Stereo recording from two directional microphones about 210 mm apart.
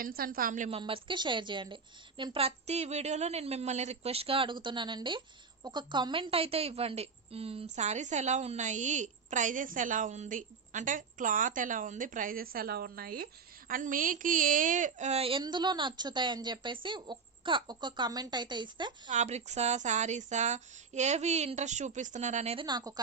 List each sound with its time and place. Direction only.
0.0 s a woman's voice: 45° right (ahead or behind)
0.8 s a woman's voice: 25° right (ahead or behind)
19.1 s a woman's voice: 35° right (ahead or behind)
22.6 s a woman's voice: 20° right (ahead or behind)